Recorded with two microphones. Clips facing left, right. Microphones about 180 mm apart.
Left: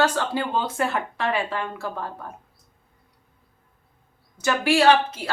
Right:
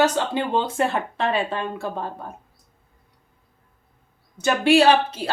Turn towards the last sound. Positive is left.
turn(degrees=-30)  # may be behind; listen again after turning